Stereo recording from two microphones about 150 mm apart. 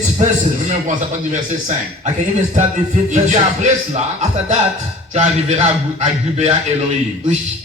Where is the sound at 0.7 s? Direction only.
55° right (ahead or behind).